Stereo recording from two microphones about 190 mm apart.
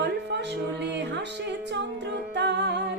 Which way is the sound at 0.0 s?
65° right (ahead or behind).